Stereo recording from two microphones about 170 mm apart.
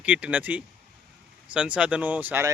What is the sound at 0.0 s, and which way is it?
Speech, 10° right (ahead or behind).